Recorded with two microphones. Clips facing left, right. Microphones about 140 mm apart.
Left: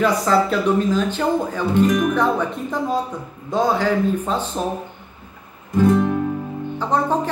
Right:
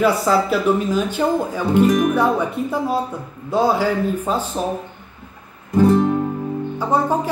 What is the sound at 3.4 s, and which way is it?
Speech, 10° right (ahead or behind).